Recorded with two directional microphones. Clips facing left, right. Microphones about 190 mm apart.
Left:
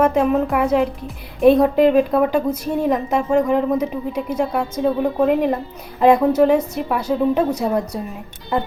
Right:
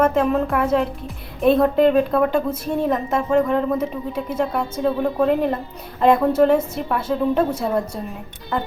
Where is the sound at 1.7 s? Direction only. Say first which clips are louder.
Left 2 dB; 5° left (ahead or behind).